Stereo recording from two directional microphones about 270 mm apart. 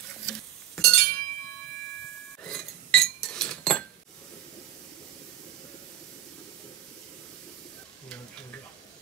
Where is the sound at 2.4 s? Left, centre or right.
Centre.